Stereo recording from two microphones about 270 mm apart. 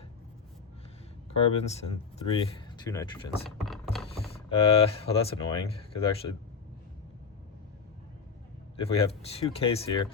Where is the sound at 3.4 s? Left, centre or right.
Centre.